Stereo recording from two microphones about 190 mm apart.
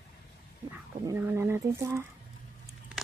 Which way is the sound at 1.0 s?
15° right (ahead or behind).